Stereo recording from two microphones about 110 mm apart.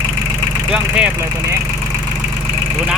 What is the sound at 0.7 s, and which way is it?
Speech, 10° right (ahead or behind).